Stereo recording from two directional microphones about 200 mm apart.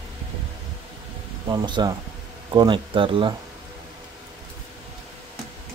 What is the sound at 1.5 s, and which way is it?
Speech, 20° right (ahead or behind).